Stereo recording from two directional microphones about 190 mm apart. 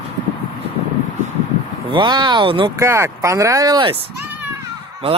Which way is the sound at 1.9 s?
25° right (ahead or behind).